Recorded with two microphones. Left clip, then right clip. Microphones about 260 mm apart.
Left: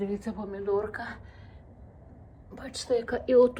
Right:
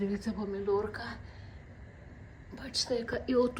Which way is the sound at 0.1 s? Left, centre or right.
Centre.